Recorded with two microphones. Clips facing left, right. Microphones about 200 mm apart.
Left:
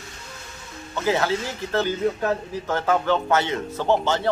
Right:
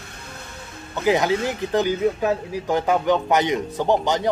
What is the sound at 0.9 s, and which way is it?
Speech, 15° right (ahead or behind).